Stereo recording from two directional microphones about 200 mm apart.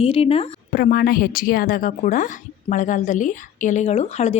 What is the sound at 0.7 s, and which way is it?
A woman's voice, 45° left (ahead or behind).